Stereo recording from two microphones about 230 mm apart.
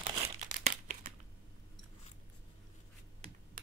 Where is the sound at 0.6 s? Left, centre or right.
Right.